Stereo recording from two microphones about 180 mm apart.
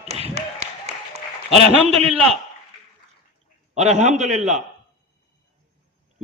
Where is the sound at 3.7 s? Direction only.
40° right (ahead or behind).